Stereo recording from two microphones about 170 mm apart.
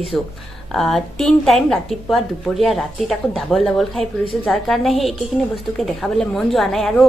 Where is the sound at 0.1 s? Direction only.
5° left (ahead or behind).